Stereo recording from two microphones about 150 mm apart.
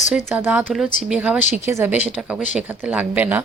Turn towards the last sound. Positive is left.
turn(degrees=-10)  # may be behind; listen again after turning